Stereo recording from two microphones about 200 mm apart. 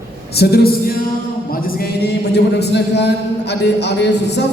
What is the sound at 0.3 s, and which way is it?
A man's voice, 50° left (ahead or behind).